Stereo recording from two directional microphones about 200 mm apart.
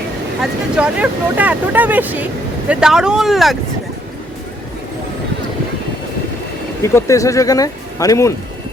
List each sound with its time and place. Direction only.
0.8 s speech: 5° right (ahead or behind)
6.8 s speech: 15° left (ahead or behind)